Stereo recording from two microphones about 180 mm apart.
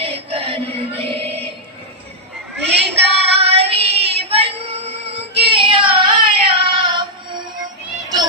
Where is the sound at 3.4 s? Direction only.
35° right (ahead or behind).